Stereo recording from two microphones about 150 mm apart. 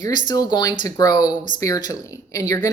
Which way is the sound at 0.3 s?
25° left (ahead or behind).